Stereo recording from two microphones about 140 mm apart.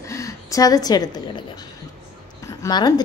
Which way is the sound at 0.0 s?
20° left (ahead or behind).